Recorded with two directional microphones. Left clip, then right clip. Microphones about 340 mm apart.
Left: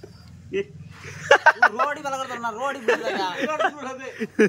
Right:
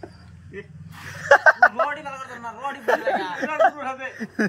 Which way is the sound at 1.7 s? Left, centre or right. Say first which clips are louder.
Left 1 dB; centre.